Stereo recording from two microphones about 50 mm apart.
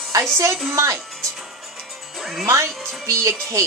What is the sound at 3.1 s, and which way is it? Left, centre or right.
Speech, right.